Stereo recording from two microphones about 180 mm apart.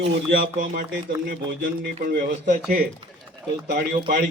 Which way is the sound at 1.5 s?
55° right (ahead or behind).